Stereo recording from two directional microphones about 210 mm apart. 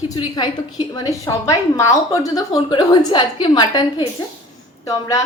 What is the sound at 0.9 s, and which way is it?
A woman's voice, 15° left (ahead or behind).